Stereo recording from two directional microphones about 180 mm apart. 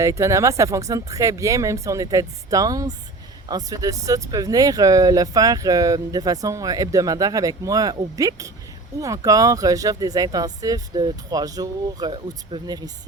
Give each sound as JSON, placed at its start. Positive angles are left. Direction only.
{"t": 0.0, "sound": "speech", "side_deg": -15}